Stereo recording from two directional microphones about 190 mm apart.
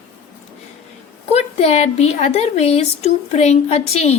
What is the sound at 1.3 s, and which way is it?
A woman's voice, 35° left (ahead or behind).